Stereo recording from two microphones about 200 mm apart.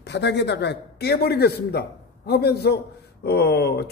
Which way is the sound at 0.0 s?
60° left (ahead or behind).